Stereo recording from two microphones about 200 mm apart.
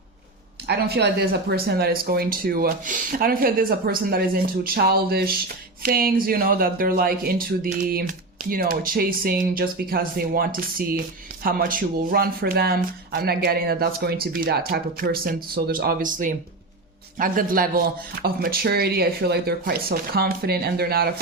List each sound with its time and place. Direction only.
0.7 s speech: 55° right (ahead or behind)